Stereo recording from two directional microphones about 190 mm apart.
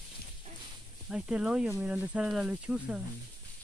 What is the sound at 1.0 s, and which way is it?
Speech, 5° right (ahead or behind).